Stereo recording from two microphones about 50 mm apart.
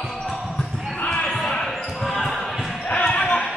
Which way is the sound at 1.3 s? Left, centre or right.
Centre.